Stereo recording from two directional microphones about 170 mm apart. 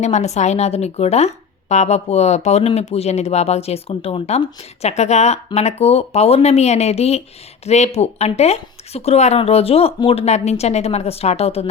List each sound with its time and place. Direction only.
0.0 s speech: 40° left (ahead or behind)